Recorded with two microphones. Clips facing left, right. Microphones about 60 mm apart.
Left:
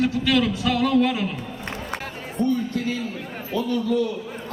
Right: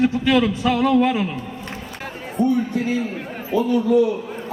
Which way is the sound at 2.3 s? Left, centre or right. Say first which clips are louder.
Right 4 dB; centre.